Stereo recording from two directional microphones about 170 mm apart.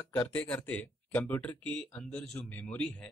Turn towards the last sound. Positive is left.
turn(degrees=5)  # may be behind; listen again after turning